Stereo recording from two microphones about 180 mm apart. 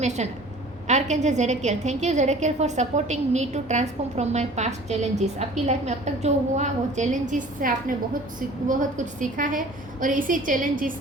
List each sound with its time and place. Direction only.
0.0 s a woman's voice: 40° right (ahead or behind)